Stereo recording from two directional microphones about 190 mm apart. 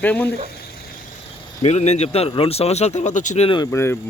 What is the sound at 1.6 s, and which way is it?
Speech, 35° left (ahead or behind).